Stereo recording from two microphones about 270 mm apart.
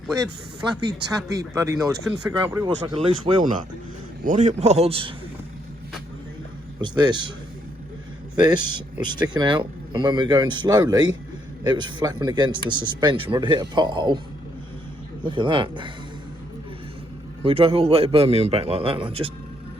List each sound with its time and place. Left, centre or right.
1.1 s a man's voice: centre
6.8 s speech: centre
8.4 s speech: centre
15.2 s speech: centre
17.4 s a man's voice: right